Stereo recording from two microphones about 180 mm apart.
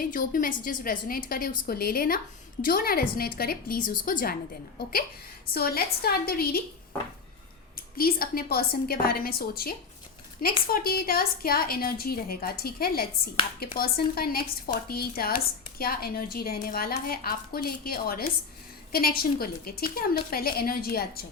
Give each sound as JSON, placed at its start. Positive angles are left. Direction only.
{"t": 0.0, "sound": "a woman's voice", "side_deg": 50}
{"t": 5.5, "sound": "a woman's voice", "side_deg": 60}
{"t": 7.8, "sound": "a woman's voice", "side_deg": 55}